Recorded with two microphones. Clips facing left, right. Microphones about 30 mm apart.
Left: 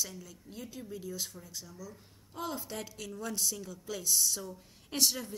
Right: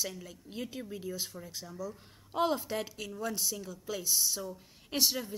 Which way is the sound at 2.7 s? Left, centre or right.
Centre.